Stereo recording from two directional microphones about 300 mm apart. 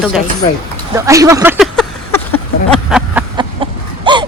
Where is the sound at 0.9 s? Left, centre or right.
Centre.